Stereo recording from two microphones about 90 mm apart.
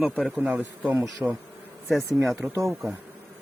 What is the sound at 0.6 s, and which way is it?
Speech, 20° right (ahead or behind).